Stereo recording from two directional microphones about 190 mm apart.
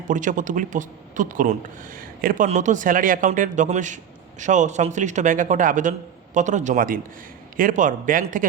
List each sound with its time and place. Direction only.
0.1 s a man's voice: 45° right (ahead or behind)